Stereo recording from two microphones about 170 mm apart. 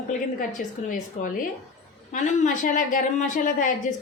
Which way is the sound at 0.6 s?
55° left (ahead or behind).